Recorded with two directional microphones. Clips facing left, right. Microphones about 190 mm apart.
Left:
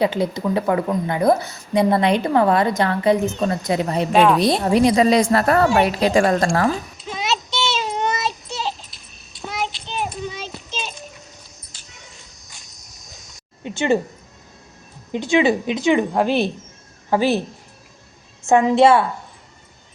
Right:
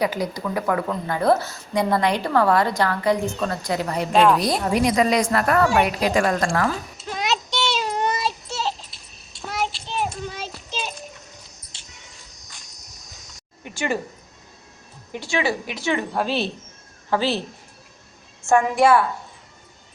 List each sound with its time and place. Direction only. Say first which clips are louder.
0.0 s a woman's voice: left 4 dB; 25° left (ahead or behind)
4.1 s a woman's voice: left 1 dB; centre (ahead or behind)
4.4 s a woman's voice: left 5 dB; 25° left (ahead or behind)
7.3 s a sound: left 1 dB; 15° right (ahead or behind)
9.4 s child singing: even; centre (ahead or behind)
11.7 s a sound: left 1 dB; 25° right (ahead or behind)
13.7 s speech: left 7 dB; 25° left (ahead or behind)
15.1 s a woman's voice: left 7 dB; 20° left (ahead or behind)
18.4 s a woman's voice: left 4 dB; 20° left (ahead or behind)